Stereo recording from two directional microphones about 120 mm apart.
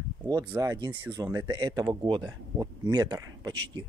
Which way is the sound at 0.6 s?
30° right (ahead or behind).